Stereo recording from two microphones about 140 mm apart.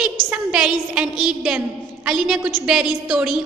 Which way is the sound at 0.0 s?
5° right (ahead or behind).